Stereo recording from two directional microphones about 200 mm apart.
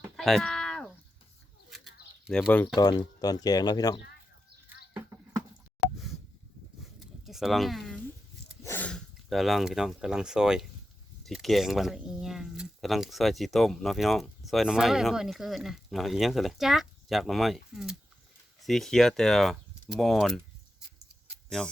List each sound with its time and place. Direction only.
0.2 s cat: centre (ahead or behind)
2.2 s speech: centre (ahead or behind)
2.7 s speech: 20° left (ahead or behind)
6.8 s a sound: centre (ahead or behind)
8.6 s speech: 10° left (ahead or behind)